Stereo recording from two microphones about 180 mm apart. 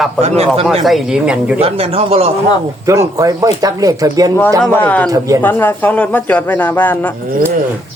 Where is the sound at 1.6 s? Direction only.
35° right (ahead or behind).